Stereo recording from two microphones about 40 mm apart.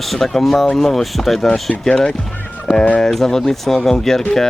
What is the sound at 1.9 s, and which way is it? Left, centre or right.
Speech, centre.